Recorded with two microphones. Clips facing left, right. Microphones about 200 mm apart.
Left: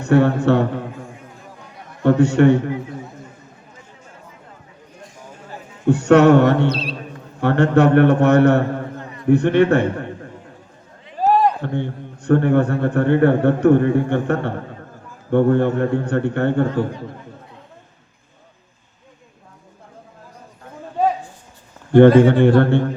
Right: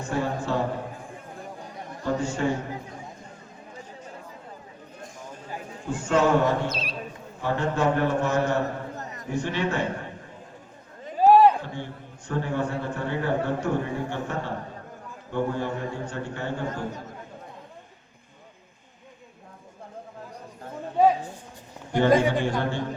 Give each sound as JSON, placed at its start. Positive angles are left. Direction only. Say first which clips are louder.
{"t": 0.0, "sound": "a man's voice", "louder": "left 13 dB", "side_deg": 70}
{"t": 2.0, "sound": "a man's voice", "louder": "left 13 dB", "side_deg": 70}
{"t": 5.8, "sound": "a man's voice", "louder": "left 11 dB", "side_deg": 70}
{"t": 8.6, "sound": "a sound", "louder": "left 6 dB", "side_deg": -40}
{"t": 9.2, "sound": "a man's voice", "louder": "left 14 dB", "side_deg": 60}
{"t": 11.3, "sound": "a sound", "louder": "right 1 dB", "side_deg": -10}
{"t": 11.6, "sound": "a man's voice", "louder": "left 11 dB", "side_deg": 60}
{"t": 22.2, "sound": "a man's voice", "louder": "left 12 dB", "side_deg": 60}